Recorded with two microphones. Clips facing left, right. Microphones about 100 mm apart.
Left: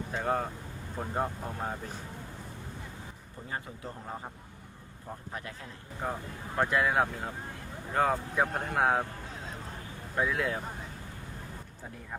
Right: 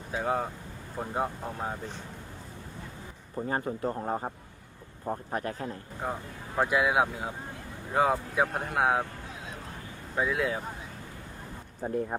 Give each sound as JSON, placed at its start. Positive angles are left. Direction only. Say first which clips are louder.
{"t": 0.1, "sound": "speech", "louder": "right 2 dB", "side_deg": -5}
{"t": 3.5, "sound": "a man's voice", "louder": "right 8 dB", "side_deg": -45}
{"t": 6.0, "sound": "speech", "louder": "even", "side_deg": -5}
{"t": 10.2, "sound": "speech", "louder": "right 2 dB", "side_deg": 0}
{"t": 11.8, "sound": "a man's voice", "louder": "right 15 dB", "side_deg": -50}